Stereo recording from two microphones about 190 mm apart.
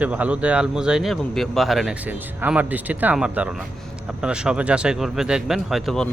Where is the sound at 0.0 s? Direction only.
5° right (ahead or behind).